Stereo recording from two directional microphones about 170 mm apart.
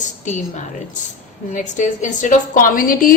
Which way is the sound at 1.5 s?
45° left (ahead or behind).